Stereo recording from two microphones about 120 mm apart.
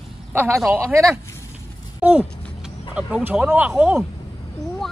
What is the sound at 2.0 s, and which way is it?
Speech, 15° right (ahead or behind).